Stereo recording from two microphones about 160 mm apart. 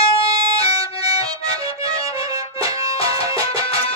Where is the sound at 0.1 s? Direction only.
35° left (ahead or behind).